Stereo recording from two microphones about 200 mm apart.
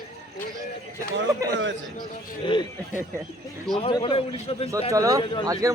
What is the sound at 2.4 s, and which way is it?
Speech, 25° left (ahead or behind).